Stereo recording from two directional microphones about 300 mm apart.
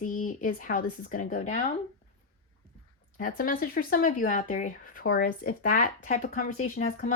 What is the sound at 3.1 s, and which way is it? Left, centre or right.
Speech, left.